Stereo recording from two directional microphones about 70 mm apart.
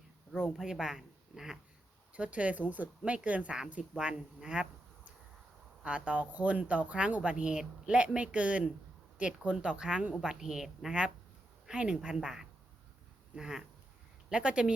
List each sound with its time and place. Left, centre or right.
0.5 s a woman's voice: centre
2.1 s a woman's voice: centre